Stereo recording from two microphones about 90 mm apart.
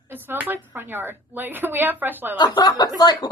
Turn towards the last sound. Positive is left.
turn(degrees=45)  # may be behind; listen again after turning